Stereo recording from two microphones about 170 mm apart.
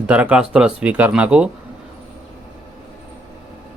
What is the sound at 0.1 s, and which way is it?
Speech, 5° right (ahead or behind).